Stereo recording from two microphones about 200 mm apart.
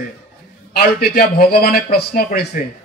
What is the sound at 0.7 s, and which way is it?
A man's voice, 50° left (ahead or behind).